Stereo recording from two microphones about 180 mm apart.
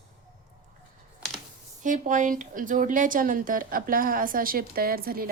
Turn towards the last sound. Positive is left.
turn(degrees=-55)  # may be behind; listen again after turning